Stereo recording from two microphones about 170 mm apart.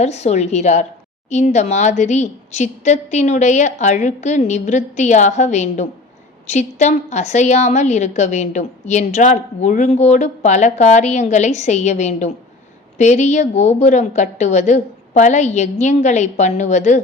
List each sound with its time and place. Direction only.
0.0 s a woman's voice: 40° left (ahead or behind)